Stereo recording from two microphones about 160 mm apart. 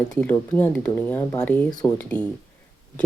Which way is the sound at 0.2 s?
10° left (ahead or behind).